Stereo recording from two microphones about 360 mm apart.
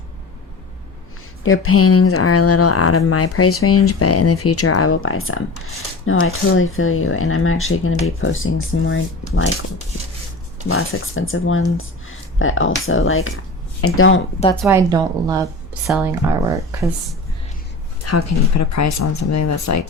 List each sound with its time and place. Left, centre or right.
1.5 s speech: left
10.7 s speech: left
14.4 s speech: centre
14.8 s a woman's voice: centre
18.0 s speech: left